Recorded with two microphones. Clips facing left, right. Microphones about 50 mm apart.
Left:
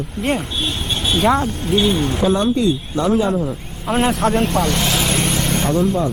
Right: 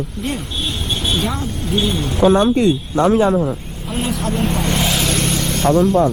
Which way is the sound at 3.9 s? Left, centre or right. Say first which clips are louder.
Left 5 dB; left.